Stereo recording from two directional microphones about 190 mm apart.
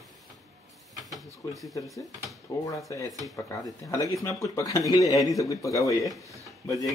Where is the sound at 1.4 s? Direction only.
15° left (ahead or behind).